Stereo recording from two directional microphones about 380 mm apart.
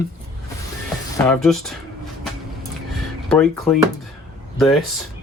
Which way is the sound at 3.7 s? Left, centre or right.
Centre.